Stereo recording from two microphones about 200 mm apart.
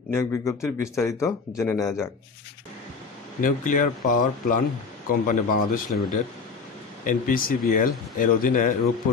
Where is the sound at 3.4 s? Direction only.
40° left (ahead or behind).